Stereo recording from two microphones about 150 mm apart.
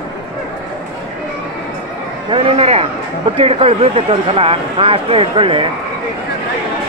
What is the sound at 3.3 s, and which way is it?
Speech, 40° right (ahead or behind).